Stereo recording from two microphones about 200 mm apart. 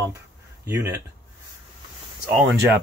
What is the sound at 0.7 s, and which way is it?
Speech, 15° right (ahead or behind).